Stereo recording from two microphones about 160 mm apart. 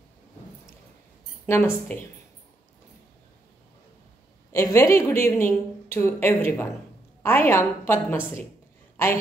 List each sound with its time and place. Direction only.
1.4 s a woman's voice: 10° left (ahead or behind)
4.5 s a woman's voice: 15° left (ahead or behind)